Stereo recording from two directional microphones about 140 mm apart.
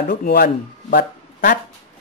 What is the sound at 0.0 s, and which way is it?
Speech, 90° left.